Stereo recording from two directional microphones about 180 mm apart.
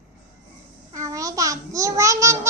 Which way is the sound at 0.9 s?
20° right (ahead or behind).